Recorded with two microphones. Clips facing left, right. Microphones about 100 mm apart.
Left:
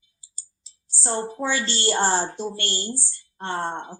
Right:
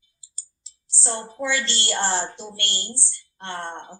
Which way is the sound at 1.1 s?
15° left (ahead or behind).